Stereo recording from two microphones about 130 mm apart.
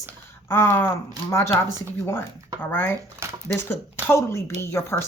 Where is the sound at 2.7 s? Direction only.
15° left (ahead or behind).